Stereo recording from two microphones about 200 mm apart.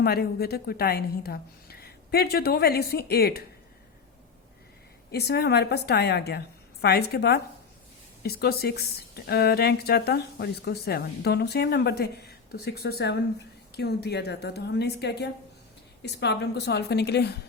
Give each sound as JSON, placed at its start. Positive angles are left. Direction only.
{"t": 0.0, "sound": "speech", "side_deg": 50}
{"t": 5.1, "sound": "a woman's voice", "side_deg": 55}